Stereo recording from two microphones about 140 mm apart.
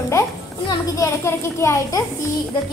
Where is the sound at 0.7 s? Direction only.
20° left (ahead or behind).